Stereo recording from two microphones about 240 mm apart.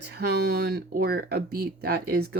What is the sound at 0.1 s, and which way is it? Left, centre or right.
Speech, right.